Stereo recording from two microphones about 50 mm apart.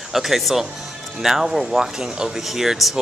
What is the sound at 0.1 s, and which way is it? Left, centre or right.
Speech, centre.